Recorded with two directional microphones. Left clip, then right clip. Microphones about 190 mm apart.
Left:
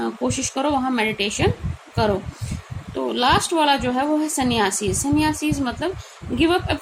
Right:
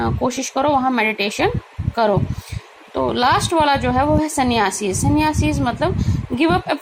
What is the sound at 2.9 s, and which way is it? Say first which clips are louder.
A woman's voice: right 2 dB; 20° right (ahead or behind).